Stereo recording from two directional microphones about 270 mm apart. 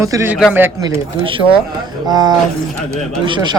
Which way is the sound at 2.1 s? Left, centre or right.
Centre.